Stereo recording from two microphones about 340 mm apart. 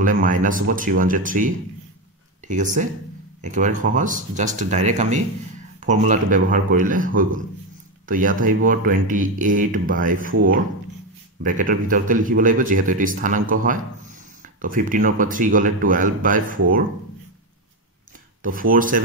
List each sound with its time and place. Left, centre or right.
0.0 s speech: right
11.4 s speech: right
16.5 s speech: right
18.4 s speech: right